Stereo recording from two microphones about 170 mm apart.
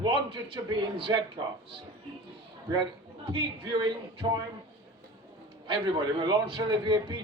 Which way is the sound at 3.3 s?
30° right (ahead or behind).